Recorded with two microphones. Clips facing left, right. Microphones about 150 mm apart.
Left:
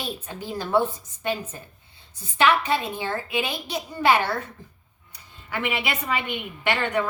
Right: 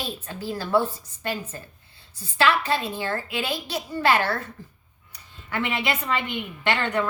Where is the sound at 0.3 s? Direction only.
20° left (ahead or behind).